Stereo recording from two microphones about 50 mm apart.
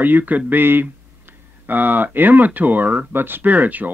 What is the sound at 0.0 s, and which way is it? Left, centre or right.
Speech, right.